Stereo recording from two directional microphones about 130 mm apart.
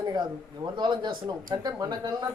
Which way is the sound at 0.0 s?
30° right (ahead or behind).